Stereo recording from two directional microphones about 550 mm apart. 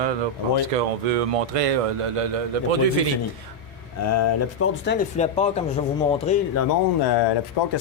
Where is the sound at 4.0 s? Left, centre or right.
Left; by 6.4 s centre.